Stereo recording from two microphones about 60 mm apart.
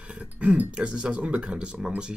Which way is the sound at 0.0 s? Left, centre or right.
Centre.